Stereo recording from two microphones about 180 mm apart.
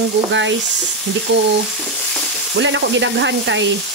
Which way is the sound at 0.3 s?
90° right.